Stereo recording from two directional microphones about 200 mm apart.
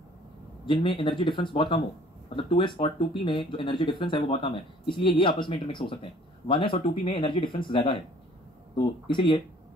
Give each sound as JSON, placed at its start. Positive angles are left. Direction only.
{"t": 0.7, "sound": "speech", "side_deg": 25}